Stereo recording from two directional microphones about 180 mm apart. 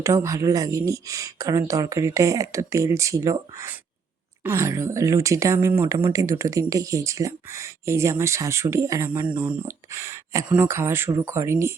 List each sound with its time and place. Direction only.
0.0 s speech: 15° right (ahead or behind)